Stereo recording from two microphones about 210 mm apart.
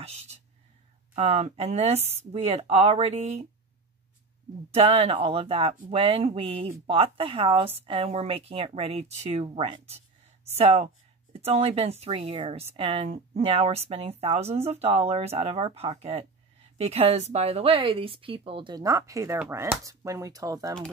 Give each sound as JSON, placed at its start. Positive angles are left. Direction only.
{"t": 1.1, "sound": "speech", "side_deg": -30}
{"t": 4.7, "sound": "speech", "side_deg": -30}